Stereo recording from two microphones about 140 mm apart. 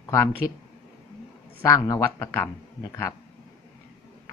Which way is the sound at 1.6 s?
20° left (ahead or behind).